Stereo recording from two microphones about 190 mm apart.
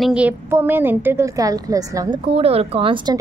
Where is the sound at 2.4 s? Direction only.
30° right (ahead or behind).